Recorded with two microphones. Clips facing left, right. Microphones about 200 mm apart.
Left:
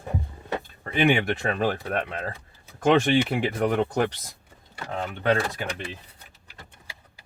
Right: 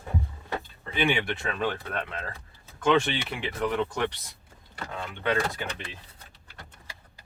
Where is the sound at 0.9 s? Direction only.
45° left (ahead or behind).